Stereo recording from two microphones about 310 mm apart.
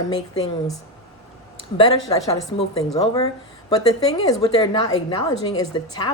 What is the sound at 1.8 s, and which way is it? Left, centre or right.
A woman's voice, centre.